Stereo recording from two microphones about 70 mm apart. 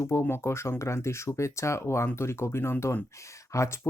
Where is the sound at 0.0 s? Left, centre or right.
Left.